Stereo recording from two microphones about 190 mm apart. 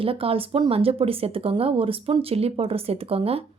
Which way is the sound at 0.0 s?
30° right (ahead or behind).